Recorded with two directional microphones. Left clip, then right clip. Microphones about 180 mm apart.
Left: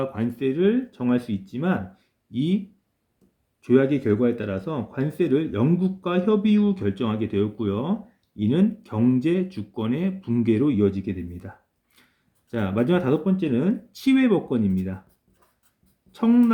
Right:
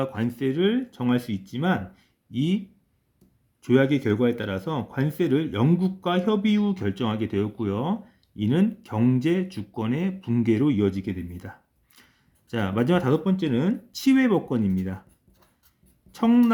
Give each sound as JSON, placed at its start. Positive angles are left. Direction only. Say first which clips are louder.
{"t": 0.0, "sound": "speech", "louder": "left 1 dB", "side_deg": -30}
{"t": 3.6, "sound": "speech", "louder": "left 1 dB", "side_deg": -35}
{"t": 12.5, "sound": "speech", "louder": "left 1 dB", "side_deg": -35}
{"t": 16.1, "sound": "speech", "louder": "left 1 dB", "side_deg": -35}